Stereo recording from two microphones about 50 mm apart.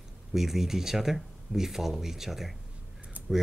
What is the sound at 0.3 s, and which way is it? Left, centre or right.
Speech, centre.